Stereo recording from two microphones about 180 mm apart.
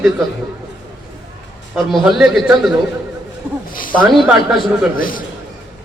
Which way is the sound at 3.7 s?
50° left (ahead or behind).